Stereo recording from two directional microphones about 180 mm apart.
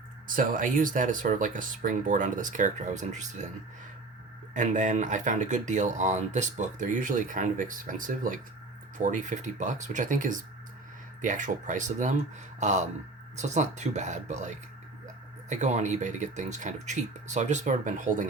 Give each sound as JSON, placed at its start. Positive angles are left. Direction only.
{"t": 0.3, "sound": "speech", "side_deg": -50}
{"t": 4.5, "sound": "speech", "side_deg": -45}